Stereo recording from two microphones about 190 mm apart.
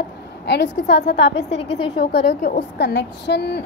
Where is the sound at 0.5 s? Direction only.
60° left (ahead or behind).